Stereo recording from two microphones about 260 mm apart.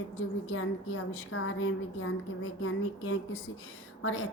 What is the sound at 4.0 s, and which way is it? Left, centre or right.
Speech, left.